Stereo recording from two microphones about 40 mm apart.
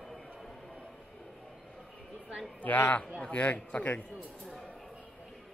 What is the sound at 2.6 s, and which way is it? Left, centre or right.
Speech, left.